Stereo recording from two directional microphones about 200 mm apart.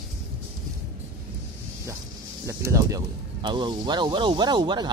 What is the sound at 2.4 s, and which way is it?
Speech, 15° right (ahead or behind).